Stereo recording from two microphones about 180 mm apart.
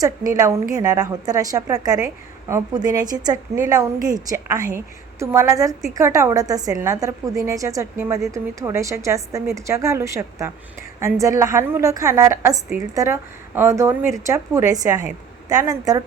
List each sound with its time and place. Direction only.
0.3 s a woman's voice: 15° right (ahead or behind)